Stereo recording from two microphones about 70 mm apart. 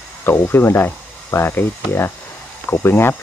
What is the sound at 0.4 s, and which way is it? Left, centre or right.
Speech, left.